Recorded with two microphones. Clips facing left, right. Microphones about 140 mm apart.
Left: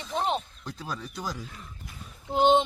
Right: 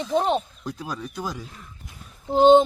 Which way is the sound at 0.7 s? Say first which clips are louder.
Right 4 dB; 10° right (ahead or behind).